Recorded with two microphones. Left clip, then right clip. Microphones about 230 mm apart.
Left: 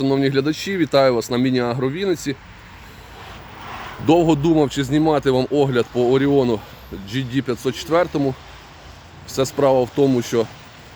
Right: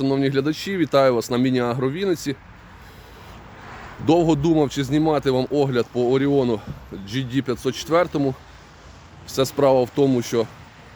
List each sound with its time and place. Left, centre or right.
0.0 s speech: centre
3.7 s a sound: left
4.0 s speech: centre